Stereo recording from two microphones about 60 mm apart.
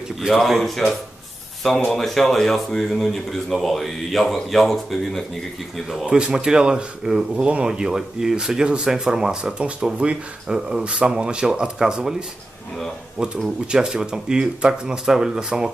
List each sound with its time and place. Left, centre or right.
0.3 s speech: centre
1.9 s speech: centre
6.1 s speech: centre
13.1 s speech: centre